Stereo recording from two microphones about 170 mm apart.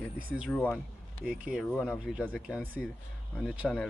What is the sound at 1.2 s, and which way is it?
Speech, 5° right (ahead or behind).